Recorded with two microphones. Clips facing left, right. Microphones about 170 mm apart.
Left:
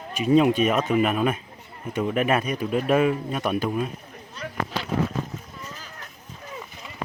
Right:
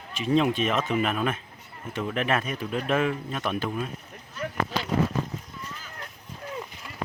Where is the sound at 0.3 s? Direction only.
15° left (ahead or behind).